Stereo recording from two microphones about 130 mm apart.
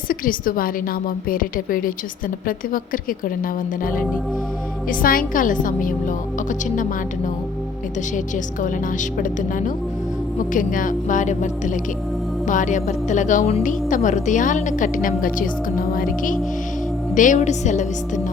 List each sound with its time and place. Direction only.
0.1 s a woman's voice: 90° left
4.9 s a woman's voice: 90° left
8.6 s a woman's voice: 85° left
13.6 s a woman's voice: 85° left
17.2 s speech: 70° left (ahead or behind)